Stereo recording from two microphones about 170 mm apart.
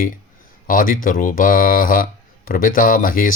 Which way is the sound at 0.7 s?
55° left (ahead or behind).